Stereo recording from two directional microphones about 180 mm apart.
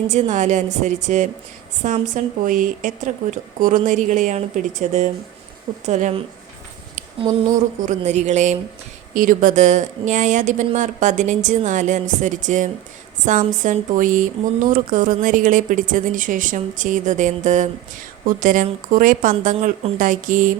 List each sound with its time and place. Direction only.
0.1 s a woman's voice: 40° right (ahead or behind)
7.9 s a woman's voice: 40° right (ahead or behind)